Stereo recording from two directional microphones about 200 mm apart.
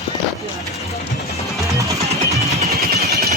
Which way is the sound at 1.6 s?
15° right (ahead or behind).